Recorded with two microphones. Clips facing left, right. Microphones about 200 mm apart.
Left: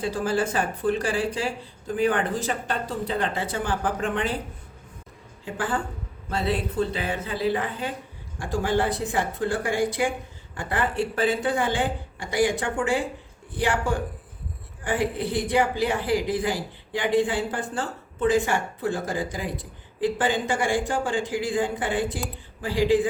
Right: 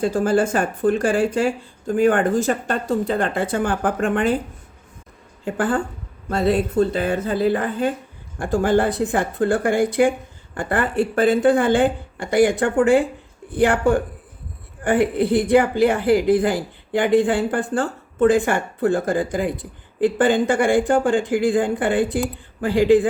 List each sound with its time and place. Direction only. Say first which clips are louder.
0.0 s speech: right 7 dB; 45° right (ahead or behind)
5.5 s a woman's voice: right 7 dB; 50° right (ahead or behind)